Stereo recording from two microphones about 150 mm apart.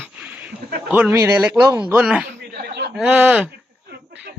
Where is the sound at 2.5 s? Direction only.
90° right.